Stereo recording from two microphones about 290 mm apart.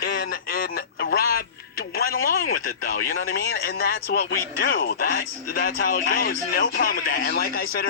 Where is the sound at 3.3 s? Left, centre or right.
Left.